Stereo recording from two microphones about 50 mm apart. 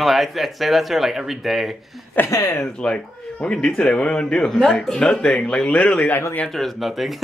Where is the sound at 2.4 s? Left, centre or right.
Left.